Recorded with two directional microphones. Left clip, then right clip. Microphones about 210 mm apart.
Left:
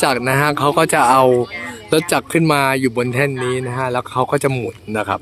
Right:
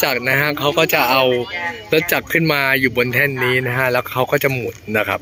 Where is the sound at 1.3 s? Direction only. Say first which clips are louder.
Left 3 dB; 45° left (ahead or behind).